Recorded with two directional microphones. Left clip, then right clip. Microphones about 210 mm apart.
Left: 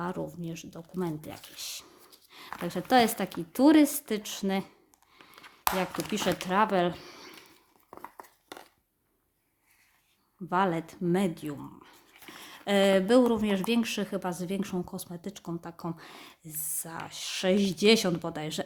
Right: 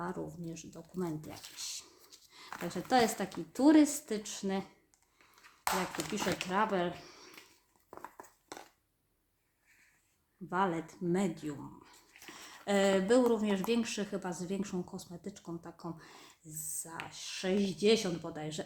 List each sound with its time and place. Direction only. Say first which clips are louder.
0.0 s speech: left 5 dB; 30° left (ahead or behind)
6.1 s speech: left 6 dB; 35° left (ahead or behind)
7.9 s a sound: left 3 dB; 10° left (ahead or behind)
10.5 s speech: left 5 dB; 30° left (ahead or behind)